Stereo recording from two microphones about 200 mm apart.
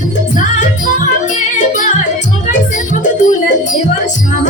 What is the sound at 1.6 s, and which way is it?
Music, 40° left (ahead or behind).